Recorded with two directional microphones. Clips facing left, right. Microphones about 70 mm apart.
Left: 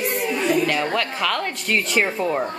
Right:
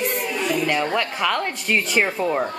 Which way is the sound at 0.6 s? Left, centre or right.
Centre.